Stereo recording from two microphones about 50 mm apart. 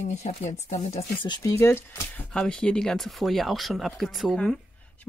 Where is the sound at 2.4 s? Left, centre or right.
Centre.